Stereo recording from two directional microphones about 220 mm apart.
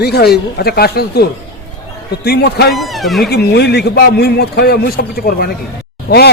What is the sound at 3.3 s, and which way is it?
A man's voice, 50° left (ahead or behind).